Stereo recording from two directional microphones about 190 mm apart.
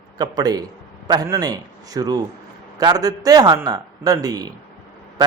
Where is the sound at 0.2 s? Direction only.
20° right (ahead or behind).